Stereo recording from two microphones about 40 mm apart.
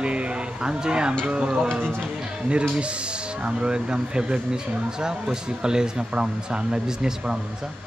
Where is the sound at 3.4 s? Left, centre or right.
Right.